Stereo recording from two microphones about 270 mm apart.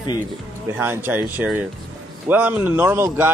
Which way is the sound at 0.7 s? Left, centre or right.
Centre.